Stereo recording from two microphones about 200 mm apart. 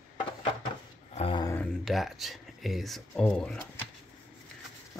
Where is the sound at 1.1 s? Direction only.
25° left (ahead or behind).